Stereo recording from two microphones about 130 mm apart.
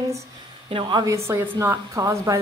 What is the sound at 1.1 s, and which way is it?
Speech, 20° right (ahead or behind).